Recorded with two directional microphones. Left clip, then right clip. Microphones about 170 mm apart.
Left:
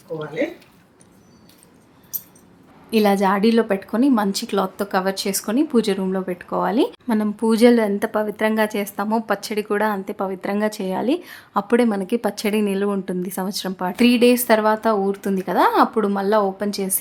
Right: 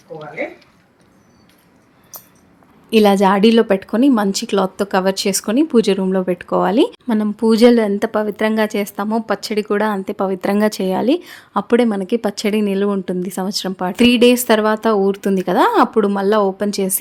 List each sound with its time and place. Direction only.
0.1 s speech: 25° left (ahead or behind)
2.9 s a woman's voice: 35° right (ahead or behind)